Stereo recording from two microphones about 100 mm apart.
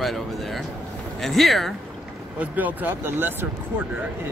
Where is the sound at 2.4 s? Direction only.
15° right (ahead or behind).